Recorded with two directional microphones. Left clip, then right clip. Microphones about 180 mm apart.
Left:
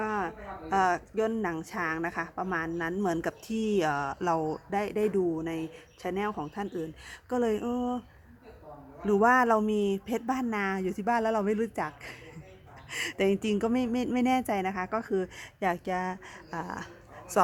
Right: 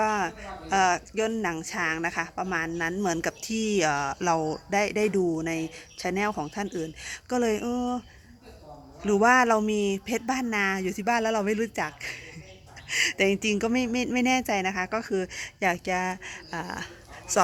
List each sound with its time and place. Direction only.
0.0 s a sound: 15° right (ahead or behind)
0.7 s speech: centre (ahead or behind)
9.0 s speech: centre (ahead or behind)